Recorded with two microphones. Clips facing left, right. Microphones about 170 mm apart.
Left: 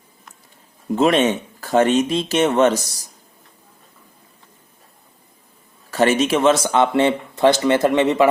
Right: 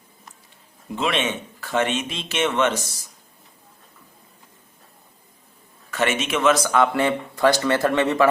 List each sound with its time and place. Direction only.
0.9 s speech: 40° left (ahead or behind)
5.9 s speech: 35° left (ahead or behind); by 8.3 s 20° left (ahead or behind)